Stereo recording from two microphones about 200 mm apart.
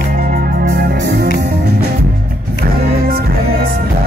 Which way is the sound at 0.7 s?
55° right (ahead or behind).